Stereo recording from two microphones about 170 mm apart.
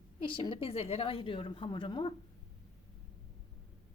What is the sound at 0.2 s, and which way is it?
A woman's voice, 30° left (ahead or behind).